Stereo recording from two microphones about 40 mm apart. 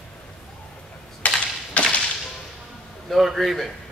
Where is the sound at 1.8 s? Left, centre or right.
Left.